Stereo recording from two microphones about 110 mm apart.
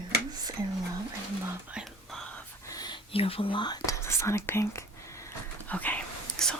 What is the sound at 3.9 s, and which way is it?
Speech, 25° left (ahead or behind).